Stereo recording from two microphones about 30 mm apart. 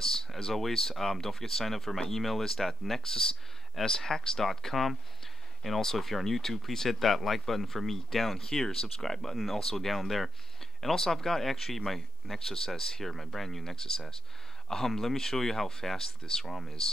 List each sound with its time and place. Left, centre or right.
0.0 s speech: centre
3.0 s speech: centre
5.6 s speech: centre
8.4 s speech: left
13.7 s speech: left